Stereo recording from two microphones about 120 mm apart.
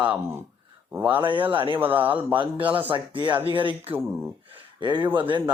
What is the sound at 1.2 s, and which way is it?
Speech, 45° right (ahead or behind).